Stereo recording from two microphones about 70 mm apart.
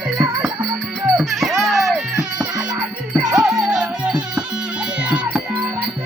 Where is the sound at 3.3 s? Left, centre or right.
Centre.